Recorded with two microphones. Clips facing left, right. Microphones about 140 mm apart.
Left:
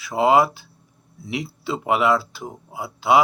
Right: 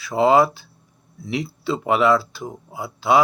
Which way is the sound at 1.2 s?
15° left (ahead or behind).